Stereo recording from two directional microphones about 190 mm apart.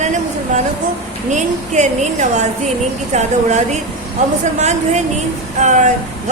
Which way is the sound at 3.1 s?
35° right (ahead or behind).